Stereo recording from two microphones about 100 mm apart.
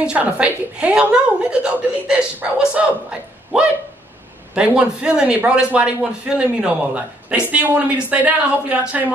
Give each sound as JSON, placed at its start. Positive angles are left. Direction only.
{"t": 0.0, "sound": "a man's voice", "side_deg": -10}